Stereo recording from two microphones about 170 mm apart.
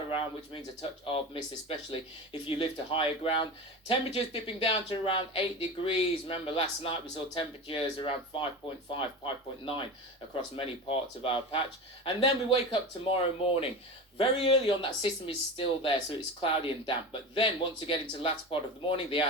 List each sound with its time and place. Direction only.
0.1 s speech: 30° left (ahead or behind)